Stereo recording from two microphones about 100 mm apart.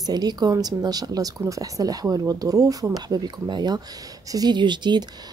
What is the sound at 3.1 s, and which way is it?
Speech, 45° right (ahead or behind).